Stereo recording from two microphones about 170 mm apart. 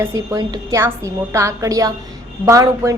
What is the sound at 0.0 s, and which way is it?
A woman's voice, 20° right (ahead or behind).